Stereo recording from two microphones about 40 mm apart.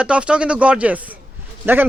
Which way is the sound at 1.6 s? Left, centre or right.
Right.